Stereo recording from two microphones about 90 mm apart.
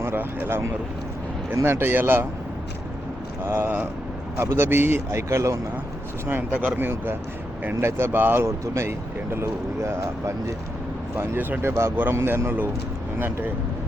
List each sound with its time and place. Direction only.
0.0 s speech: 25° right (ahead or behind)
3.4 s speech: 30° right (ahead or behind)
6.6 s speech: 20° right (ahead or behind)
11.3 s speech: 20° right (ahead or behind)